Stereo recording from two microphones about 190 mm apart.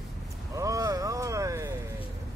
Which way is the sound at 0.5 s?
15° right (ahead or behind).